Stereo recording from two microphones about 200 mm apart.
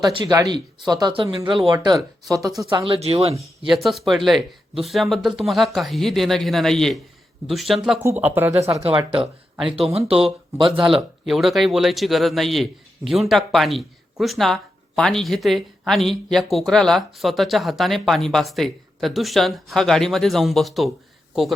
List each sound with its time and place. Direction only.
0.0 s speech: 20° right (ahead or behind)
3.7 s speech: centre (ahead or behind)
8.0 s speech: 10° right (ahead or behind)
8.7 s speech: 25° right (ahead or behind)
10.6 s speech: 25° right (ahead or behind)
10.8 s speech: centre (ahead or behind)